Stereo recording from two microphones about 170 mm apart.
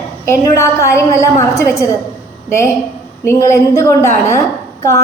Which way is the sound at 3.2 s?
15° left (ahead or behind).